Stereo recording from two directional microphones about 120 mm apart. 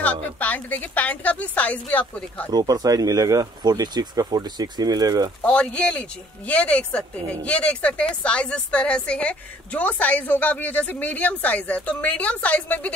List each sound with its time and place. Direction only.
0.0 s speech: 10° left (ahead or behind)
2.5 s speech: 30° right (ahead or behind)
5.4 s speech: 10° left (ahead or behind)